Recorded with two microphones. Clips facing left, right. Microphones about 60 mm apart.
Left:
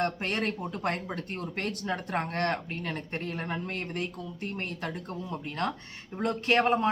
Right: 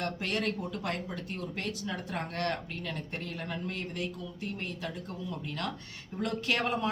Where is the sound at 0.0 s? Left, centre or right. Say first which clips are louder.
Left 3 dB; left.